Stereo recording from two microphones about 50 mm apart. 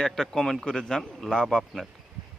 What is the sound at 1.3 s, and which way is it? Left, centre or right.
Speech, centre.